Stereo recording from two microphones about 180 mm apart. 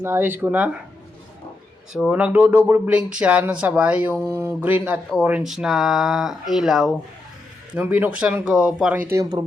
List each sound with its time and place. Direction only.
0.0 s speech: 10° right (ahead or behind)
1.9 s speech: 5° right (ahead or behind)
9.0 s speech: 15° right (ahead or behind)